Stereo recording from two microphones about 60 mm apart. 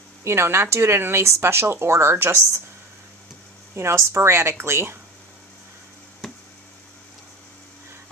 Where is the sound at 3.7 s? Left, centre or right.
Right.